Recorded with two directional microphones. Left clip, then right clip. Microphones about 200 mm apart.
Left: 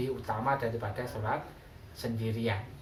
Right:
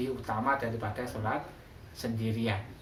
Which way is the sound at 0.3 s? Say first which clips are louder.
Right 1 dB; 20° right (ahead or behind).